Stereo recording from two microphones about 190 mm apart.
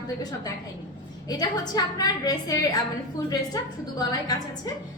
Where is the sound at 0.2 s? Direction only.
20° left (ahead or behind).